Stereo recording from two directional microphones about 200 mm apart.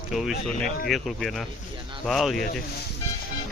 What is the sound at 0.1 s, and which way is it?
Speech, centre (ahead or behind).